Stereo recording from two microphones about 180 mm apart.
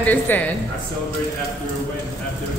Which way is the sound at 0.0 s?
10° left (ahead or behind).